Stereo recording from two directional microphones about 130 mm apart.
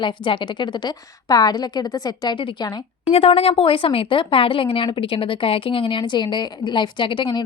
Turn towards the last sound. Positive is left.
turn(degrees=40)  # may be behind; listen again after turning